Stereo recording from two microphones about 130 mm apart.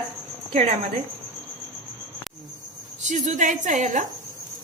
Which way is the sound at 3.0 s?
70° right (ahead or behind).